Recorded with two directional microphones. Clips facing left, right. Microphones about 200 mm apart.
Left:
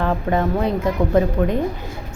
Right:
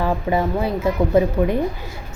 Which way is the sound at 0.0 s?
10° right (ahead or behind).